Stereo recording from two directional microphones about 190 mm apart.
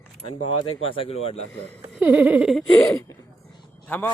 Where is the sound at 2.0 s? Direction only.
5° right (ahead or behind).